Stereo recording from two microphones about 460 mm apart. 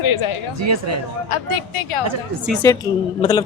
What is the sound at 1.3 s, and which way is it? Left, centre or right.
Speech, left.